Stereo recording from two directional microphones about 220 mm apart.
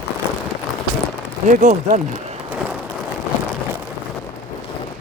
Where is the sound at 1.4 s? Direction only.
35° right (ahead or behind).